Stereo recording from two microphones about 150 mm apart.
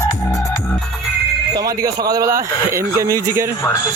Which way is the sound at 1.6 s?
25° right (ahead or behind).